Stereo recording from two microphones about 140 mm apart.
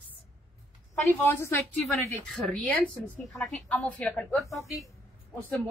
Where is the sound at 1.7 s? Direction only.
Centre (ahead or behind).